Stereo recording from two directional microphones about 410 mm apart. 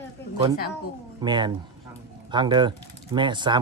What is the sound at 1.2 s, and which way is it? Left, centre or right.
Speech, centre.